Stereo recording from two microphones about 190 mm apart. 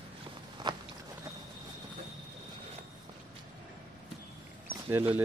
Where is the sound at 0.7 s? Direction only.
25° right (ahead or behind).